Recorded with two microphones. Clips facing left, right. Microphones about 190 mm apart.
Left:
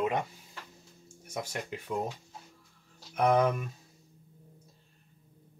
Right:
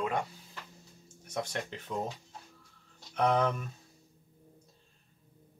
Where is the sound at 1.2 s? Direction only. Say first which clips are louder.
Right 1 dB; 10° left (ahead or behind).